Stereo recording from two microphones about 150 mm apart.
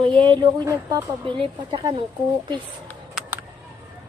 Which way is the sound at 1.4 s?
35° right (ahead or behind).